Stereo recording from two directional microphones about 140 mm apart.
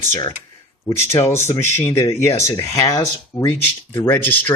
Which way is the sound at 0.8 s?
20° left (ahead or behind).